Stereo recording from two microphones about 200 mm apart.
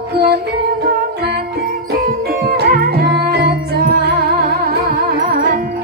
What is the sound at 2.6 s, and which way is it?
Music, 50° right (ahead or behind).